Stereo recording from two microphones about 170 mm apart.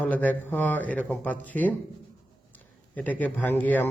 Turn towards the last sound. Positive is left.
turn(degrees=10)  # may be behind; listen again after turning